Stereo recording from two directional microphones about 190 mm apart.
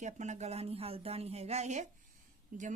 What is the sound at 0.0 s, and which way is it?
Speech, 40° right (ahead or behind).